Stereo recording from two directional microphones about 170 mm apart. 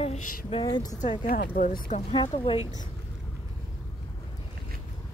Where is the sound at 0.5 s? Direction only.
25° left (ahead or behind).